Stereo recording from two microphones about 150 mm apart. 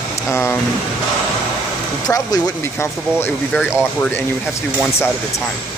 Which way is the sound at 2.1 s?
20° left (ahead or behind).